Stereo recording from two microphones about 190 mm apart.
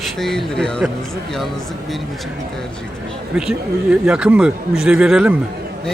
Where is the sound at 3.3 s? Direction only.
5° right (ahead or behind).